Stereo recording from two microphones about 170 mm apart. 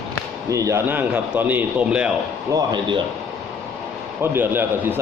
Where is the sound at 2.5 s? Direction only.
25° right (ahead or behind).